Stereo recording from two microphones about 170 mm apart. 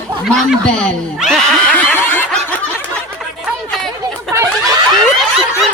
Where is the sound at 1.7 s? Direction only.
10° left (ahead or behind).